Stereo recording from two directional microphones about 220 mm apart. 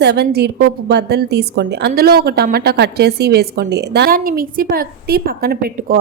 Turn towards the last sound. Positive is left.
turn(degrees=-45)  # may be behind; listen again after turning